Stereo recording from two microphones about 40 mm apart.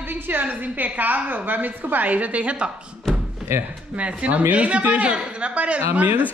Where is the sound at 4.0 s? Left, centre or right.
Right.